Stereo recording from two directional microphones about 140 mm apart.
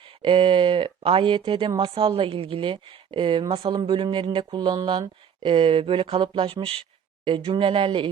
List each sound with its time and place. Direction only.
0.2 s speech: 35° right (ahead or behind)